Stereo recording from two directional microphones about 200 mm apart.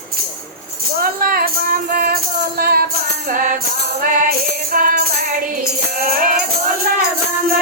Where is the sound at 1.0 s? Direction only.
50° right (ahead or behind).